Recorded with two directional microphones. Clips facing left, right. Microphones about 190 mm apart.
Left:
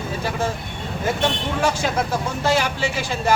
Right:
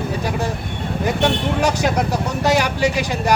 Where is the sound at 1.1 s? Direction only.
15° right (ahead or behind).